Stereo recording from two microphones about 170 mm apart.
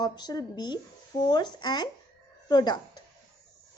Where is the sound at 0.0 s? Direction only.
25° left (ahead or behind).